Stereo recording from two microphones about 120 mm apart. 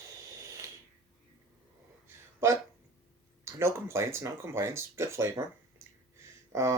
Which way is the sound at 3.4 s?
20° right (ahead or behind).